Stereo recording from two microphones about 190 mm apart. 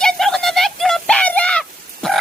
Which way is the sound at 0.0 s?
Centre (ahead or behind).